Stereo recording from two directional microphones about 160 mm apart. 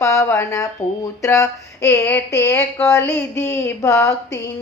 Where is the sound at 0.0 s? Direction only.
20° left (ahead or behind).